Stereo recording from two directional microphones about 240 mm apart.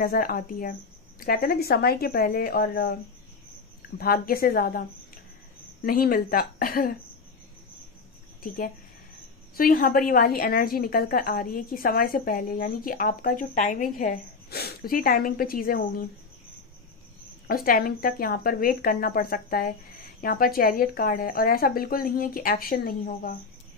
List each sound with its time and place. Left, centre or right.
0.0 s a woman's voice: left
4.0 s a woman's voice: left
8.4 s a woman's voice: left
17.5 s a woman's voice: left